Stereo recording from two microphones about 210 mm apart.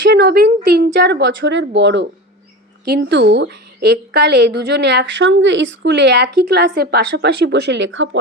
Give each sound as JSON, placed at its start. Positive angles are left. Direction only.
{"t": 0.0, "sound": "a woman's voice", "side_deg": -55}